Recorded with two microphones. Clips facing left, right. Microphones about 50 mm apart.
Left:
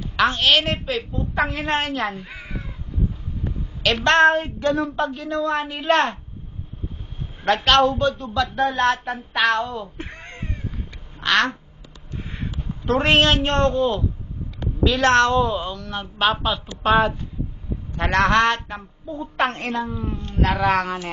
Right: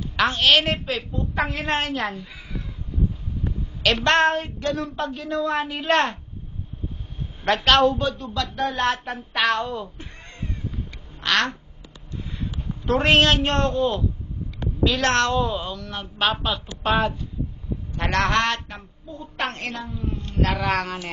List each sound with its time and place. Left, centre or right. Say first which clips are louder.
0.1 s speech: left 1 dB; centre
2.1 s crow: left 2 dB; left
3.8 s speech: left 3 dB; centre
7.4 s speech: left 1 dB; centre
9.9 s cat: left 7 dB; left
10.2 s cat: left 2 dB; left
11.1 s quack: left 3 dB; centre
12.8 s a woman's voice: left 1 dB; centre